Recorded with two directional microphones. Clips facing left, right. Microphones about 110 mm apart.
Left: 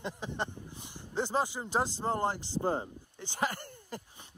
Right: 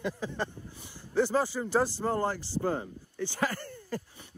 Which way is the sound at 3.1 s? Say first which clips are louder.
Right 3 dB; 20° left (ahead or behind).